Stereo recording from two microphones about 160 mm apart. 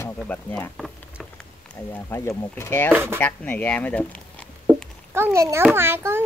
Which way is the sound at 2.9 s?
10° right (ahead or behind).